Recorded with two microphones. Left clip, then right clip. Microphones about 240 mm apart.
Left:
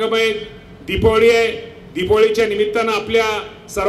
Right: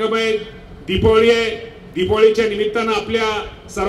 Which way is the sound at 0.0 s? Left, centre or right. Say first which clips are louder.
Left 1 dB; left.